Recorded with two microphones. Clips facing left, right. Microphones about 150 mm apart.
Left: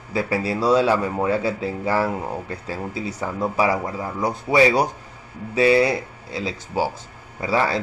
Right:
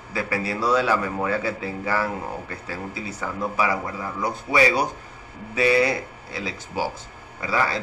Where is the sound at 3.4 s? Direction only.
25° left (ahead or behind).